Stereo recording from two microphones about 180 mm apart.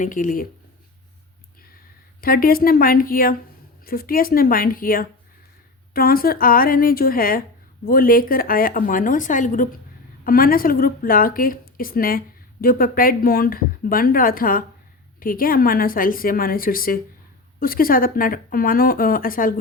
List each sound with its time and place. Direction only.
0.0 s speech: 45° left (ahead or behind)
2.2 s speech: 55° left (ahead or behind)